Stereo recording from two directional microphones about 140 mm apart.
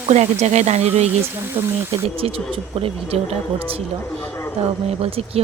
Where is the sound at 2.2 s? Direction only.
40° right (ahead or behind).